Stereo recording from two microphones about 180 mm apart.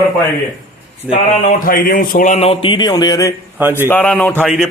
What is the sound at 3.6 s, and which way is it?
Speech, 10° right (ahead or behind).